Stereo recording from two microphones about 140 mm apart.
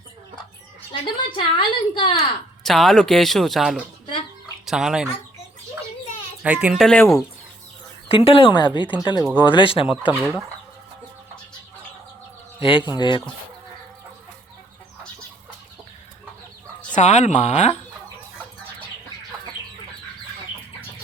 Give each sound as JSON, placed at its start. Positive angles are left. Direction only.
{"t": 1.0, "sound": "a woman's voice", "side_deg": 35}
{"t": 2.6, "sound": "speech", "side_deg": 0}
{"t": 4.0, "sound": "chicken", "side_deg": 35}
{"t": 4.6, "sound": "speech", "side_deg": -5}
{"t": 6.4, "sound": "speech", "side_deg": -10}
{"t": 6.8, "sound": "speech", "side_deg": 5}
{"t": 8.0, "sound": "a woman's voice", "side_deg": 40}
{"t": 9.8, "sound": "speech", "side_deg": -10}
{"t": 12.5, "sound": "a woman's voice", "side_deg": 40}
{"t": 16.9, "sound": "speech", "side_deg": 55}